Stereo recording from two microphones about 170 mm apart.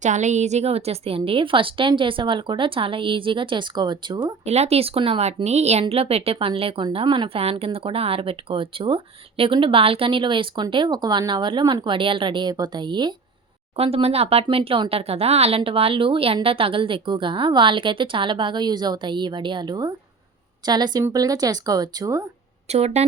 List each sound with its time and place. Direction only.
0.0 s speech: 45° right (ahead or behind); by 4.4 s 25° right (ahead or behind)
4.4 s speech: 40° right (ahead or behind); by 22.3 s 20° right (ahead or behind)
22.7 s speech: 40° right (ahead or behind)